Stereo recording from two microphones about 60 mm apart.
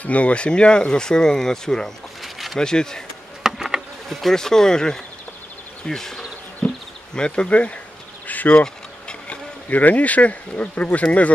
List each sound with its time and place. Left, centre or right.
0.0 s speech: left
2.2 s a sound: centre
2.6 s speech: centre
3.4 s speech: centre
6.6 s insect: centre
7.2 s speech: centre